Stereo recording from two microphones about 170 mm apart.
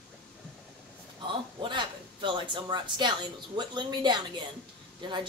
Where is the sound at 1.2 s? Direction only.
30° right (ahead or behind).